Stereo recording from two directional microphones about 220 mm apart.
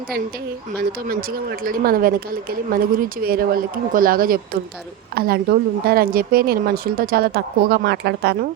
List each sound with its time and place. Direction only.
0.9 s a woman's voice: 40° right (ahead or behind)